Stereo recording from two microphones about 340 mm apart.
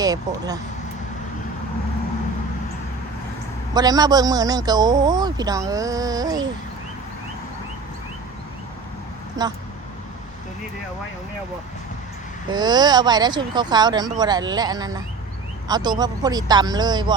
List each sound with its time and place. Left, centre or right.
0.0 s speech: centre
3.8 s a man's voice: centre
9.4 s a man's voice: centre
12.5 s a man's voice: centre